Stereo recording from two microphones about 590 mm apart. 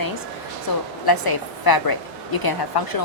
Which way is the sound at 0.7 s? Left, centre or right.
Left.